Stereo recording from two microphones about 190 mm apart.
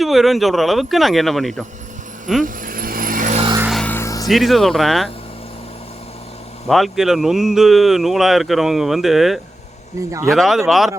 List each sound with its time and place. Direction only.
0.0 s speech: centre (ahead or behind)
2.4 s vehicle: 45° right (ahead or behind)
3.7 s music: 5° left (ahead or behind)
4.3 s speech: centre (ahead or behind)
6.7 s speech: centre (ahead or behind)
10.1 s speech: 15° right (ahead or behind)
10.3 s speech: centre (ahead or behind)